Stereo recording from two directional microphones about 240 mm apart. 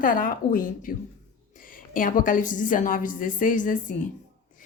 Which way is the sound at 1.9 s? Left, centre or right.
Left.